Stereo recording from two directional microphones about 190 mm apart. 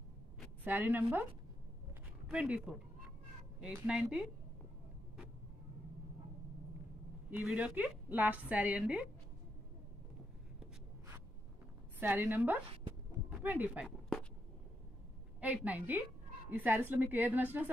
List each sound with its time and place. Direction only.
0.7 s a woman's voice: 10° right (ahead or behind)
2.2 s speech: 5° right (ahead or behind)
7.2 s a woman's voice: 5° right (ahead or behind)
12.0 s a woman's voice: 10° right (ahead or behind)
13.8 s a sound: 5° left (ahead or behind)
15.4 s a woman's voice: 10° right (ahead or behind)